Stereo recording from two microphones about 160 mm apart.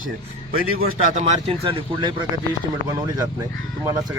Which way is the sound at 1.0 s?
45° right (ahead or behind).